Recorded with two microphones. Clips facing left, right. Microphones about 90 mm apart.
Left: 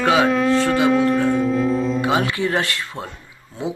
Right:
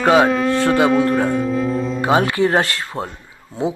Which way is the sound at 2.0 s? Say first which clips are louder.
Right 4 dB; 40° right (ahead or behind).